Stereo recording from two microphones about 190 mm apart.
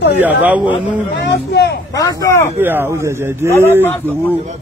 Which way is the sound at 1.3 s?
60° left (ahead or behind).